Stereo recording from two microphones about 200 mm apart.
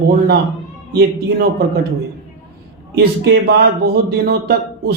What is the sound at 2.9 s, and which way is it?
Speech, 55° right (ahead or behind).